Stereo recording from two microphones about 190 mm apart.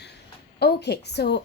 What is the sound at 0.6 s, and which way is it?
Speech, 60° left (ahead or behind).